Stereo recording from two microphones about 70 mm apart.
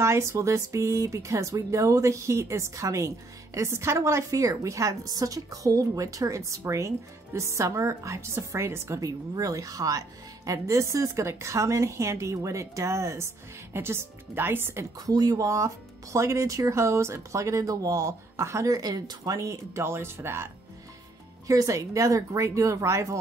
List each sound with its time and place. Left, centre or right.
0.0 s speech: right
9.0 s speech: right
15.0 s speech: right
21.5 s speech: right